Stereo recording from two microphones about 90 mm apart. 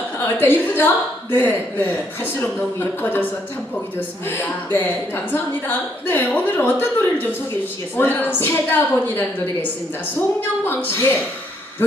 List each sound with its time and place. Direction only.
0.2 s a woman's voice: 25° left (ahead or behind)
4.3 s a woman's voice: 25° left (ahead or behind)